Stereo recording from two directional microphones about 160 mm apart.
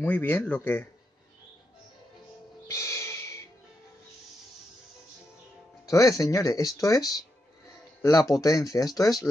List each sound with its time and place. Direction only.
0.0 s speech: 10° left (ahead or behind)
2.7 s owl: 20° left (ahead or behind)
5.9 s speech: 20° left (ahead or behind)